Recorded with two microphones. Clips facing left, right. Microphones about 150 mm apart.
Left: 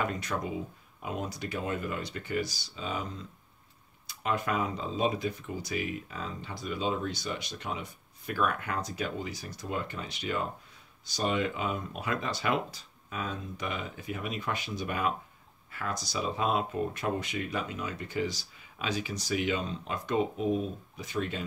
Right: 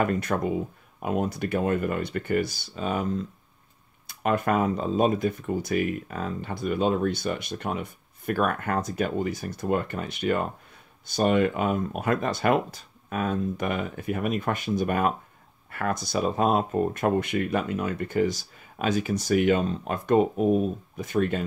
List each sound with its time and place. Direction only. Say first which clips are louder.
0.0 s speech: right 7 dB; 50° right (ahead or behind)